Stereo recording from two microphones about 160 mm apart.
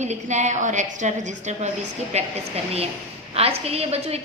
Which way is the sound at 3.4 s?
40° right (ahead or behind).